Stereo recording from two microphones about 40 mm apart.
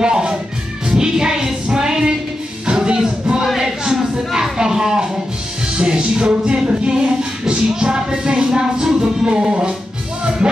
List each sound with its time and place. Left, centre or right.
0.0 s music: centre
3.5 s a sound: centre
5.7 s music: right